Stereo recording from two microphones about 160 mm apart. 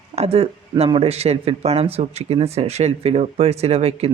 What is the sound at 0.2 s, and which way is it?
Speech, 40° right (ahead or behind).